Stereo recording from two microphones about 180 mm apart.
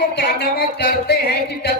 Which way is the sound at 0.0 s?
65° left (ahead or behind).